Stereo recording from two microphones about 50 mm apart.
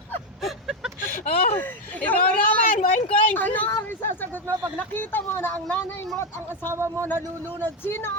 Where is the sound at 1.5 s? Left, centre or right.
Left.